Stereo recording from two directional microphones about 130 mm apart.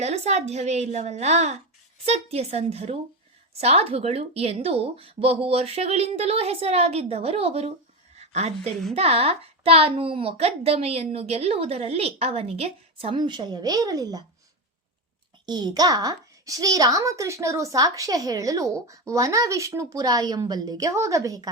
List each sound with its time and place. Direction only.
0.0 s a woman's voice: 55° right (ahead or behind); by 14.3 s 30° right (ahead or behind)
15.4 s a child's voice: 35° right (ahead or behind)